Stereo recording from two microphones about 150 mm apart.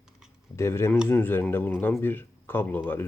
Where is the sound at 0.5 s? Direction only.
15° left (ahead or behind).